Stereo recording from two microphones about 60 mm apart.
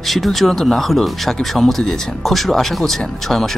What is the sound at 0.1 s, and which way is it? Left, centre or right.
Speech, centre.